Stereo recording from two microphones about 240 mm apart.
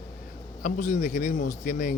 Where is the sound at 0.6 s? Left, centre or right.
Left.